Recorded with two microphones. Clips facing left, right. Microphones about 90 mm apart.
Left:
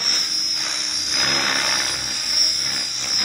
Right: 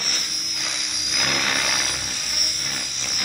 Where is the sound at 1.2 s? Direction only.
35° left (ahead or behind).